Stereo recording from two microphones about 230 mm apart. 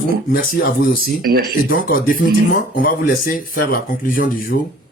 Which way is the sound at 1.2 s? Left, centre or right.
Right.